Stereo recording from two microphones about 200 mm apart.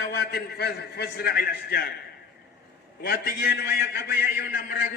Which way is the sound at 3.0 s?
50° left (ahead or behind).